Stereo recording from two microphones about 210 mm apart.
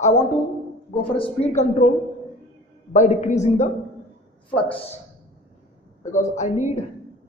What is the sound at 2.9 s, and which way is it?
Speech, 35° left (ahead or behind).